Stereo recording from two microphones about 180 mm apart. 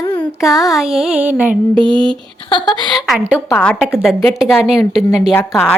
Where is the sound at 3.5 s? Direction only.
10° left (ahead or behind).